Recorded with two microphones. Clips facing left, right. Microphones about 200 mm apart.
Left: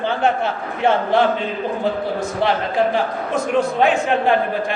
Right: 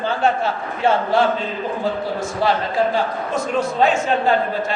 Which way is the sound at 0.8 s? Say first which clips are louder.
Left 1 dB; 20° left (ahead or behind).